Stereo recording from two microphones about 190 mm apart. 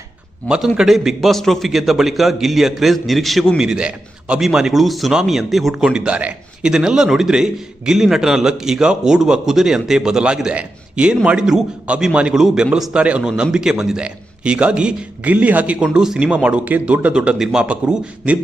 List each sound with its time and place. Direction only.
0.4 s a man's voice: 5° right (ahead or behind)